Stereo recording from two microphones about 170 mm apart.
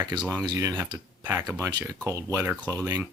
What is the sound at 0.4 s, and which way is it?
Speech, 20° right (ahead or behind).